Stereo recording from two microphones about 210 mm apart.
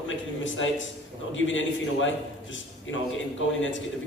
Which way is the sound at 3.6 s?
65° left (ahead or behind).